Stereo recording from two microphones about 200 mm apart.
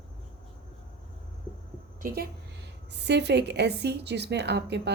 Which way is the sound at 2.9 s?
60° right (ahead or behind).